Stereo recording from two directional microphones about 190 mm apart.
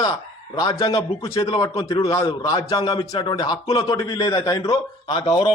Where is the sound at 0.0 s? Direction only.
20° left (ahead or behind).